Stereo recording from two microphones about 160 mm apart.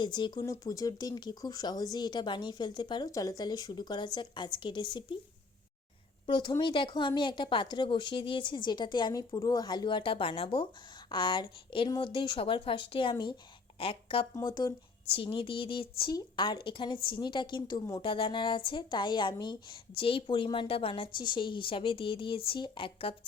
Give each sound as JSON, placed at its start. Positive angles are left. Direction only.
{"t": 0.0, "sound": "speech", "side_deg": 30}
{"t": 6.2, "sound": "a woman's voice", "side_deg": 30}